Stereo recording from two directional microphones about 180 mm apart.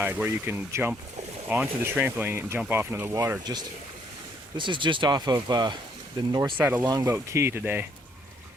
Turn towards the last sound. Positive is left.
turn(degrees=-10)  # may be behind; listen again after turning